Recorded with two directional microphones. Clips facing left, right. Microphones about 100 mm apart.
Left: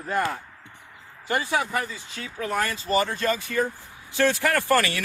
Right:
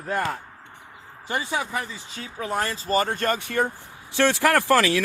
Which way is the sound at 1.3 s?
20° right (ahead or behind).